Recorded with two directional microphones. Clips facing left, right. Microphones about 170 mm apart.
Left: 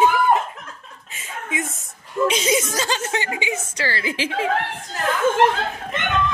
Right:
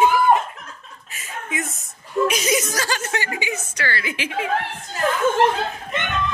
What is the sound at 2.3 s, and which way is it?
A woman's voice, 25° left (ahead or behind).